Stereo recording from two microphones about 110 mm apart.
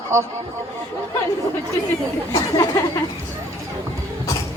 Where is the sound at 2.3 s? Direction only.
35° left (ahead or behind).